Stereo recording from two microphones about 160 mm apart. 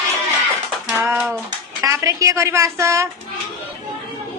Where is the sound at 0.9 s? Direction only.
10° right (ahead or behind).